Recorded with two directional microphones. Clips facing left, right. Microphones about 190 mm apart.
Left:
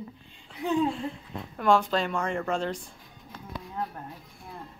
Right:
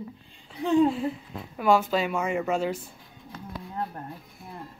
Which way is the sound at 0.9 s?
5° right (ahead or behind).